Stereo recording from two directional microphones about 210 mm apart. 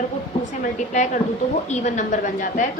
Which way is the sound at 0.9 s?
35° left (ahead or behind).